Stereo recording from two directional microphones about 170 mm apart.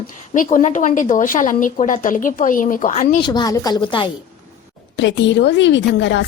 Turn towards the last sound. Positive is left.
turn(degrees=90)